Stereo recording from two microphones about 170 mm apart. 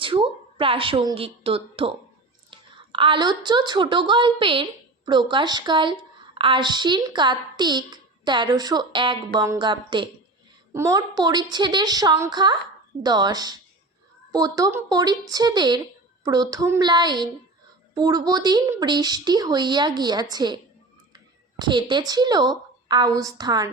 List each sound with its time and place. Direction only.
0.0 s a woman's voice: 30° right (ahead or behind)
21.6 s a woman's voice: 25° right (ahead or behind)